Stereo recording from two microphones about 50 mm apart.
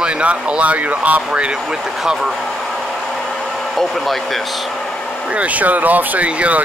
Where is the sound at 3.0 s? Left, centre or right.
Centre.